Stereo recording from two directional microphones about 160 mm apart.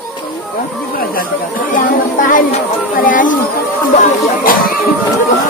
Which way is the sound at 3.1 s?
55° left (ahead or behind).